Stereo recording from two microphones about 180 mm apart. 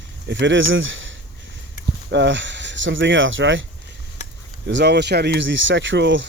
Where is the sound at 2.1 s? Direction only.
85° right.